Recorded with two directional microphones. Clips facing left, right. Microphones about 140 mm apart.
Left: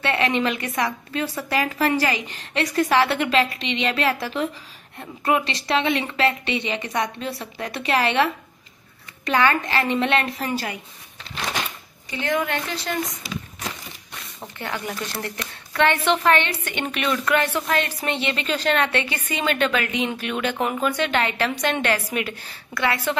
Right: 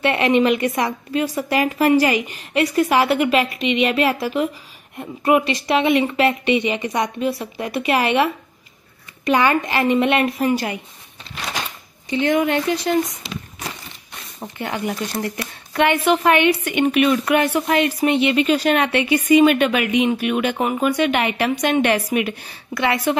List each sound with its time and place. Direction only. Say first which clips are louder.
0.0 s speech: right 5 dB; 15° right (ahead or behind)
12.1 s speech: right 6 dB; 20° right (ahead or behind)
14.4 s speech: right 5 dB; 15° right (ahead or behind)